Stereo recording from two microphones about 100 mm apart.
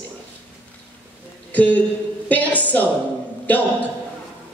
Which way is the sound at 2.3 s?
15° left (ahead or behind).